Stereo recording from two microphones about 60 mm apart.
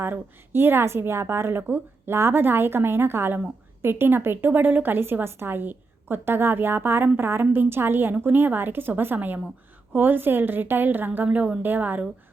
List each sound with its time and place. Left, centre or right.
0.0 s a woman's voice: right
11.3 s speech: right
11.6 s a woman's voice: right